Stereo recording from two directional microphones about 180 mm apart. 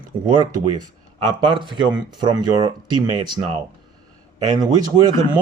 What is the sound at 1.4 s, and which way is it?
Speech, 25° right (ahead or behind).